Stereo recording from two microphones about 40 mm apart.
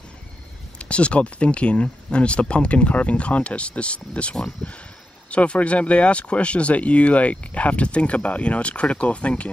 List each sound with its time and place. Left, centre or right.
0.7 s speech: left